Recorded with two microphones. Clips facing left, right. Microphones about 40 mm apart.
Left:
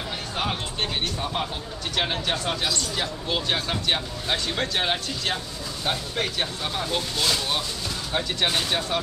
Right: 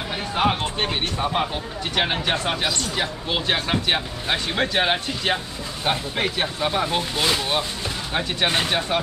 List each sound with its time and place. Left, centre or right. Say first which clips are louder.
0.4 s speech: right 7 dB; right